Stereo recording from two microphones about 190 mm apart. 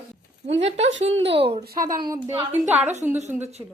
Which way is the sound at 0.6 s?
35° right (ahead or behind).